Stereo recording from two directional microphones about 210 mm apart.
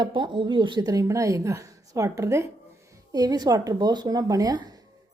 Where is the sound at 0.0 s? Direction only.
20° right (ahead or behind).